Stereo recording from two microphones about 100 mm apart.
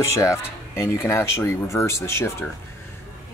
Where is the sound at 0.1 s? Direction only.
30° left (ahead or behind).